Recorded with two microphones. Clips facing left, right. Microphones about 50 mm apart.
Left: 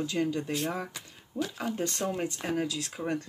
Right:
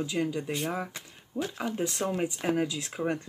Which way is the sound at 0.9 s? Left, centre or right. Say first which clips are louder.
Right 1 dB; right.